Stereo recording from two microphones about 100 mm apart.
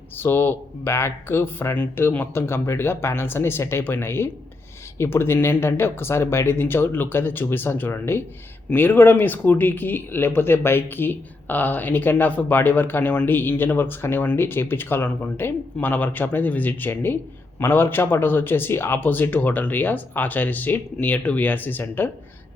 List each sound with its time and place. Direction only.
0.2 s speech: 20° left (ahead or behind)